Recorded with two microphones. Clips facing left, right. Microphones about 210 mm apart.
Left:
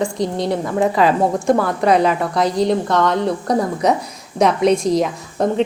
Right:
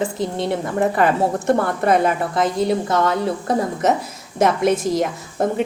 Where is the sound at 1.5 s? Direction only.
55° right (ahead or behind).